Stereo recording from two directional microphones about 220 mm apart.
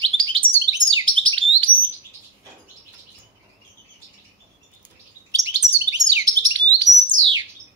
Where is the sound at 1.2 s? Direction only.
60° right (ahead or behind).